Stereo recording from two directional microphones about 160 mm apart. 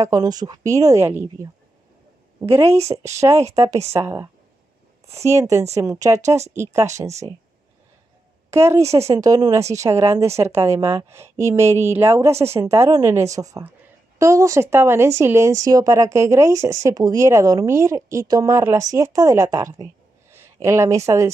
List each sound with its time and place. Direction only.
0.0 s a woman's voice: 25° right (ahead or behind)
8.5 s a woman's voice: 15° right (ahead or behind)